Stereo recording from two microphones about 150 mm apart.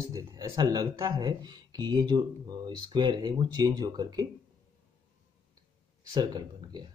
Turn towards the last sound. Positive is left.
turn(degrees=-30)  # may be behind; listen again after turning